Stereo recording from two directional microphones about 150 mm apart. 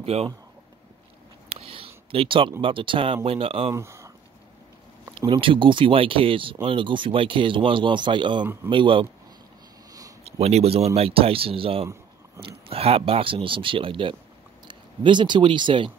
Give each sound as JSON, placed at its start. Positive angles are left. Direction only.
{"t": 0.0, "sound": "speech", "side_deg": -45}
{"t": 1.5, "sound": "a sound", "side_deg": -40}
{"t": 2.6, "sound": "speech", "side_deg": -35}
{"t": 3.7, "sound": "speech", "side_deg": -20}
{"t": 5.1, "sound": "speech", "side_deg": -35}
{"t": 10.2, "sound": "speech", "side_deg": -45}